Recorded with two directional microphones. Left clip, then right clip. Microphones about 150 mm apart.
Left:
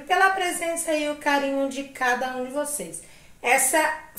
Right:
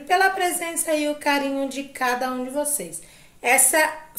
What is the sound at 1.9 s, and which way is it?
Speech, 15° right (ahead or behind).